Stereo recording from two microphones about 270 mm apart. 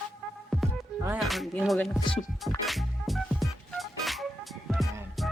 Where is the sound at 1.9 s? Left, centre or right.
Centre.